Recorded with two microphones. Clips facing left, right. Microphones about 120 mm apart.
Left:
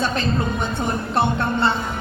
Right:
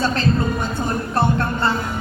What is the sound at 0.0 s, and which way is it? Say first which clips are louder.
Speech: right 2 dB; 20° left (ahead or behind).